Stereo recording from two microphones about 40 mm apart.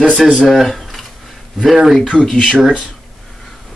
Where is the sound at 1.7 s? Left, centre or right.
Centre.